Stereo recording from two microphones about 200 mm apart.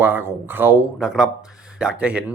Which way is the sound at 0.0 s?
10° right (ahead or behind).